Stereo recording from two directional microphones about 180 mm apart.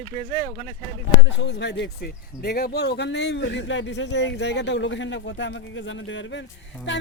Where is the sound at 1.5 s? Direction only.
70° left (ahead or behind).